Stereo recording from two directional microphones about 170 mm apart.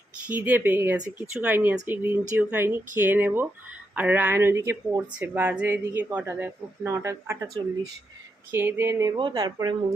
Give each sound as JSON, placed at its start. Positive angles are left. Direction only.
{"t": 0.3, "sound": "a woman's voice", "side_deg": -10}
{"t": 8.5, "sound": "a woman's voice", "side_deg": -15}